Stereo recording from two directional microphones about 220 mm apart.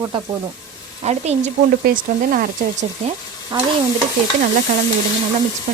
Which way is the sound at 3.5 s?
20° right (ahead or behind).